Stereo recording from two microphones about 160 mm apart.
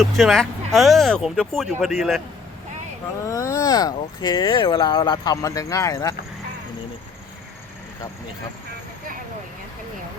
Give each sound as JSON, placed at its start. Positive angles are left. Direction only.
{"t": 0.0, "sound": "speech", "side_deg": 0}
{"t": 3.2, "sound": "speech", "side_deg": 20}